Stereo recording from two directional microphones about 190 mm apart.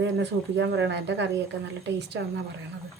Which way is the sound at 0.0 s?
65° right (ahead or behind).